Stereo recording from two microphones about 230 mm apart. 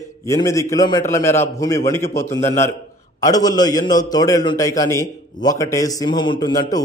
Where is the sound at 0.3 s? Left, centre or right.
Centre.